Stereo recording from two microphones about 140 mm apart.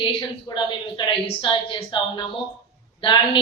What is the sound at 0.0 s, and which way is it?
A woman's voice, 35° left (ahead or behind).